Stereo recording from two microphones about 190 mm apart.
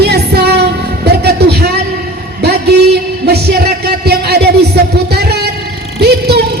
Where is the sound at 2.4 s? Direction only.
60° right (ahead or behind).